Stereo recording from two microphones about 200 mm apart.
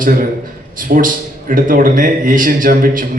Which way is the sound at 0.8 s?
40° right (ahead or behind).